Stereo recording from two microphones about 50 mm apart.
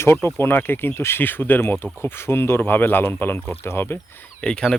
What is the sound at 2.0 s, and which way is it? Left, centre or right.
Speech, left.